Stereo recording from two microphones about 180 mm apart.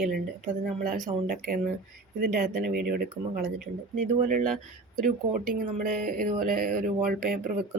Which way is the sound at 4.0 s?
45° right (ahead or behind).